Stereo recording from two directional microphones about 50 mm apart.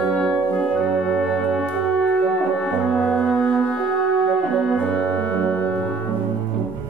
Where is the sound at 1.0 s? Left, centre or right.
Centre.